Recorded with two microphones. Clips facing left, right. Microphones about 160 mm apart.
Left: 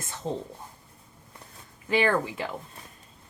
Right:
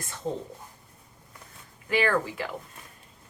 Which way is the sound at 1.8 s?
25° left (ahead or behind).